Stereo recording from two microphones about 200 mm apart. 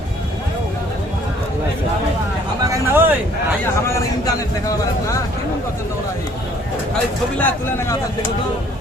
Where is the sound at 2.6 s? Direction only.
15° right (ahead or behind).